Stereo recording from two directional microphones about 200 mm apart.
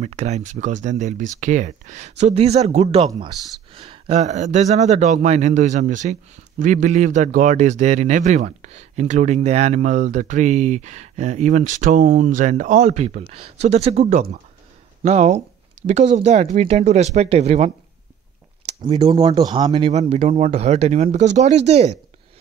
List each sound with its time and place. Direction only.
0.0 s speech: 35° right (ahead or behind)
3.1 s speech: 20° right (ahead or behind)
3.3 s speech: centre (ahead or behind)
3.7 s speech: 25° right (ahead or behind)
18.8 s speech: 30° right (ahead or behind)